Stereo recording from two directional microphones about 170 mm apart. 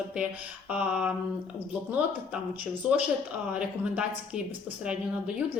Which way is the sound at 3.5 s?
5° right (ahead or behind).